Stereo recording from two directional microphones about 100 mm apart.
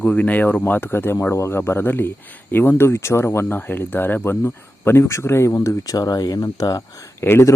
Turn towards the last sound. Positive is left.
turn(degrees=25)  # may be behind; listen again after turning